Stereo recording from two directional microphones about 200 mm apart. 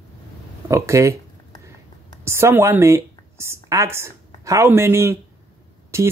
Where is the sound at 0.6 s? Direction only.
15° right (ahead or behind).